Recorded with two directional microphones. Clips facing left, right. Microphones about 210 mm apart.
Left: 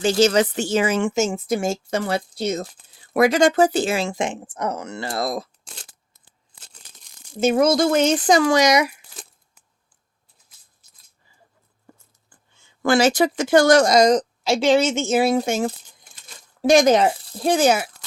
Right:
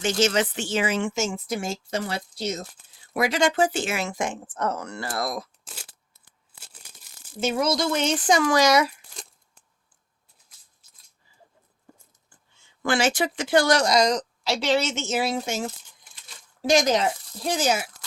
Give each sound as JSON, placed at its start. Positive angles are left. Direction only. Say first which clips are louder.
{"t": 0.0, "sound": "a woman's voice", "louder": "left 6 dB", "side_deg": 35}
{"t": 5.6, "sound": "a sound", "louder": "left 1 dB", "side_deg": -5}
{"t": 7.4, "sound": "a woman's voice", "louder": "left 7 dB", "side_deg": 50}
{"t": 8.5, "sound": "speech", "louder": "left 2 dB", "side_deg": 15}
{"t": 12.8, "sound": "a woman's voice", "louder": "left 6 dB", "side_deg": 40}